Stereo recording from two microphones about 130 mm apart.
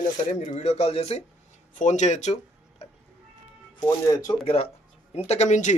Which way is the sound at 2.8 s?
55° left (ahead or behind).